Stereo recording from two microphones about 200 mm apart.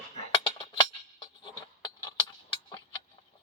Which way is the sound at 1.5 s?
20° left (ahead or behind).